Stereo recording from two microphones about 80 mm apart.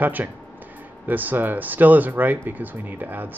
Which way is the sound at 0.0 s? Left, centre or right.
Right.